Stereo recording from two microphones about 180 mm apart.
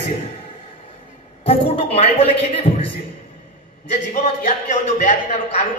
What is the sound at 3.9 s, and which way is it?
A man's voice, 45° left (ahead or behind).